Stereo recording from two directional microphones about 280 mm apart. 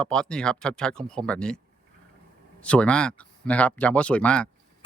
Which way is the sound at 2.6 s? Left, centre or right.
Centre.